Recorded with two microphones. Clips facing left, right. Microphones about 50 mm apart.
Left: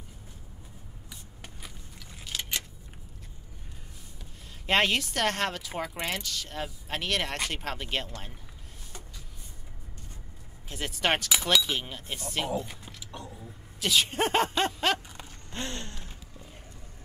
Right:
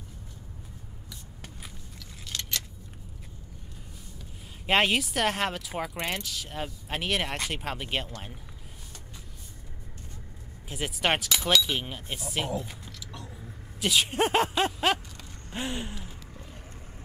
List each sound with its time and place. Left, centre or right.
2.0 s keys jangling: centre
4.6 s speech: centre
10.7 s speech: centre
13.0 s music: left
13.3 s speech: centre
15.5 s gasp: centre